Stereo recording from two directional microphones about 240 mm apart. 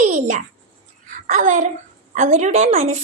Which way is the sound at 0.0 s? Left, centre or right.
Right.